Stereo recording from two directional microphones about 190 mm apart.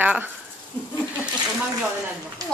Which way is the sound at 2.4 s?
20° right (ahead or behind).